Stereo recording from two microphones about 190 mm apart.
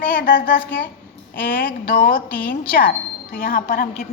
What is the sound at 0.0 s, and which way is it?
Speech, 45° left (ahead or behind).